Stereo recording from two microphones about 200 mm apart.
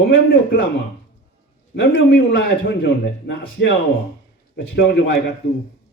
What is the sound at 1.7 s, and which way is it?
A man's voice, 60° left (ahead or behind).